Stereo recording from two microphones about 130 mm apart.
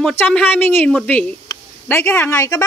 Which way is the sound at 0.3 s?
15° left (ahead or behind).